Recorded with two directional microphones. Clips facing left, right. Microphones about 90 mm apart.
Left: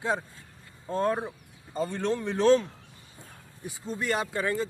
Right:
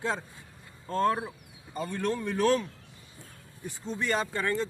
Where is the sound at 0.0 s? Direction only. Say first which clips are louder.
Left 2 dB; 15° left (ahead or behind).